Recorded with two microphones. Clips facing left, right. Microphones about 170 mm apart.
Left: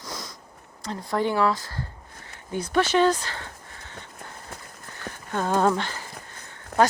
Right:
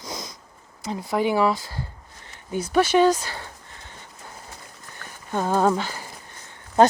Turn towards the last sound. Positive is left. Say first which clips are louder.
# right 4 dB
turn(degrees=70)  # may be behind; listen again after turning